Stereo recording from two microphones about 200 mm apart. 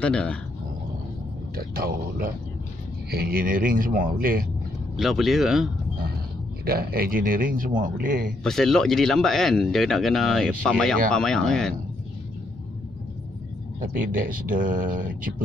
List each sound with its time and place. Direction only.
0.0 s speech: 5° left (ahead or behind)
1.5 s speech: 45° right (ahead or behind)
4.9 s speech: centre (ahead or behind)
6.6 s speech: 50° right (ahead or behind)
8.5 s speech: centre (ahead or behind)
13.7 s speech: 40° right (ahead or behind)